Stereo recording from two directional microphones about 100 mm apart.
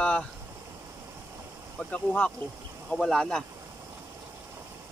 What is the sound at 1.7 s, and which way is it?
Speech, 15° left (ahead or behind).